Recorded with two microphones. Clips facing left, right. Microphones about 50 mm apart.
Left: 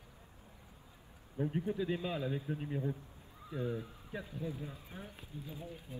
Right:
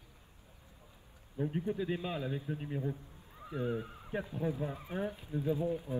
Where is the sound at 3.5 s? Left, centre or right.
Right.